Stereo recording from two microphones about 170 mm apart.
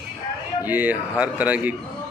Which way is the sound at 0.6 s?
10° right (ahead or behind).